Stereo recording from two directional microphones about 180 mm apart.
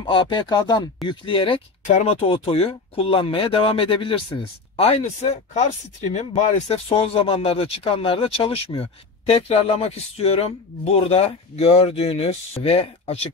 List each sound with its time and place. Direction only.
0.0 s speech: 25° left (ahead or behind)